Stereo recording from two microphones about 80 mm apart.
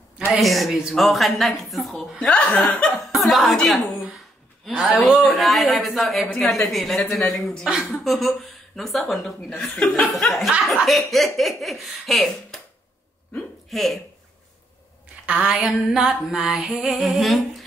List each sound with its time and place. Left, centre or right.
0.3 s a woman's voice: centre
2.1 s speech: centre
2.9 s a woman's voice: centre
13.7 s speech: centre
15.2 s a sound: centre